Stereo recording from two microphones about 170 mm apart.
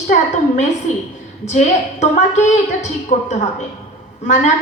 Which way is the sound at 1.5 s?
45° left (ahead or behind).